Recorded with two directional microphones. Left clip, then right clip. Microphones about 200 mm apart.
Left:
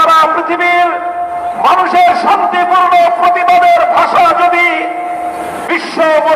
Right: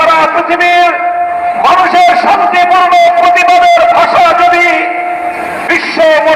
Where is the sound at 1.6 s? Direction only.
35° right (ahead or behind).